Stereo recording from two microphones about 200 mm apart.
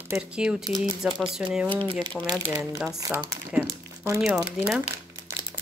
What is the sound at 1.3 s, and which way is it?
Speech, 5° right (ahead or behind).